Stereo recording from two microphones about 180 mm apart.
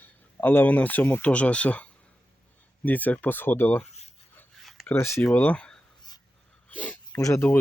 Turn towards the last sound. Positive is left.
turn(degrees=15)  # may be behind; listen again after turning